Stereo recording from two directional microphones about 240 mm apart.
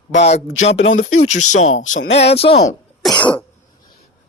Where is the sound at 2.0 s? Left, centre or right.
Left.